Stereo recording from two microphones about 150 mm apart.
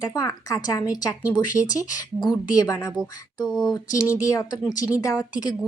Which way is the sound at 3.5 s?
Centre (ahead or behind).